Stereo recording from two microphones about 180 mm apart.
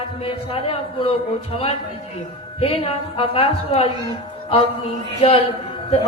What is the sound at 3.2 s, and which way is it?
Speech, 30° left (ahead or behind).